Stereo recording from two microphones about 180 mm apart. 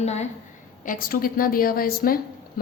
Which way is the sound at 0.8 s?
50° left (ahead or behind).